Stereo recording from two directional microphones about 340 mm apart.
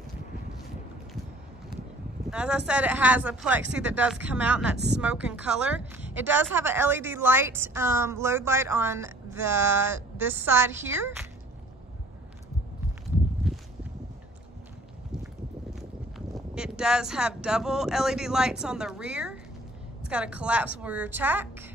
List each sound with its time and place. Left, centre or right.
2.2 s speech: centre
13.5 s walk: centre
16.5 s speech: centre